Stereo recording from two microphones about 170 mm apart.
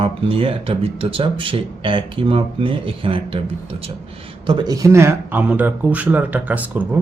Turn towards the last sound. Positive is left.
turn(degrees=-10)  # may be behind; listen again after turning